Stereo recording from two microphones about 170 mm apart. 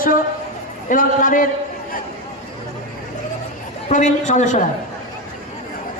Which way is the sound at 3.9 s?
45° left (ahead or behind).